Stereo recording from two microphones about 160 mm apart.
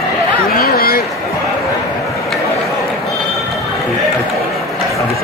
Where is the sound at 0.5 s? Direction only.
65° left (ahead or behind).